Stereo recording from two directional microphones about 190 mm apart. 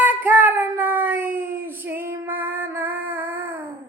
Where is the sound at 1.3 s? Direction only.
50° right (ahead or behind).